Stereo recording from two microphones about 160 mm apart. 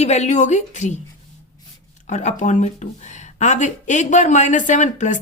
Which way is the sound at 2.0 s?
50° left (ahead or behind).